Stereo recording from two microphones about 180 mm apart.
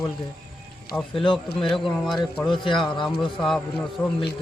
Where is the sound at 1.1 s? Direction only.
30° left (ahead or behind).